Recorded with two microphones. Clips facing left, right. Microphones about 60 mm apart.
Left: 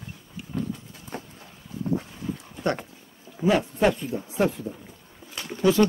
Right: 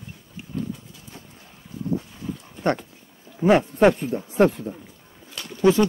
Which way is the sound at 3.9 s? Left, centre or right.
Right.